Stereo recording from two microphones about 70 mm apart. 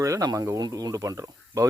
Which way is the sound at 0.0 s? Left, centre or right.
Right.